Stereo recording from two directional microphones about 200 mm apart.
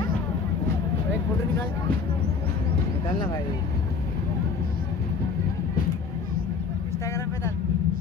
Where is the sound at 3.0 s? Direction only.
20° left (ahead or behind).